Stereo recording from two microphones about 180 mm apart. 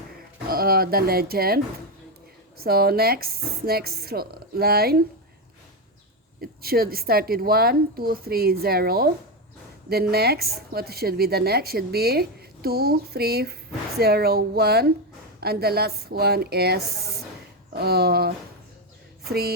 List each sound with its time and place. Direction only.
0.4 s speech: 55° right (ahead or behind)
6.4 s speech: 55° right (ahead or behind)